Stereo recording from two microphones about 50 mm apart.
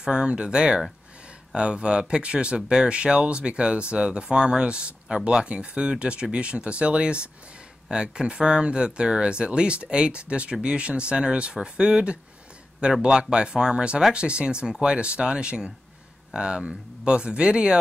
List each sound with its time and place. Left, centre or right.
0.0 s speech: centre